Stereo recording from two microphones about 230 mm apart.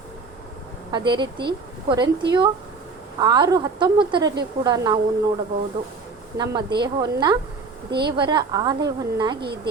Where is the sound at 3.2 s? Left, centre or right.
Centre.